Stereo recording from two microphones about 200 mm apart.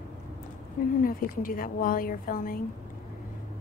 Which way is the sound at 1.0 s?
45° left (ahead or behind).